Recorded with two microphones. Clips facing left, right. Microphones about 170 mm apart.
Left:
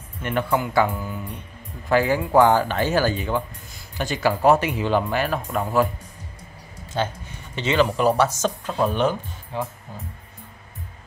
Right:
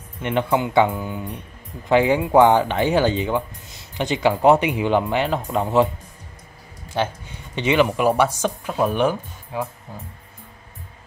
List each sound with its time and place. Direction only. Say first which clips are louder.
0.2 s speech: right 2 dB; 20° right (ahead or behind)
7.5 s speech: right 2 dB; 15° right (ahead or behind)